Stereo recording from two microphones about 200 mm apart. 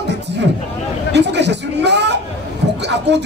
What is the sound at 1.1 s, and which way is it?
Speech, 60° right (ahead or behind).